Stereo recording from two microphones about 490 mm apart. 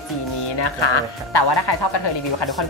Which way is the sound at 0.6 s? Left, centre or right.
Left.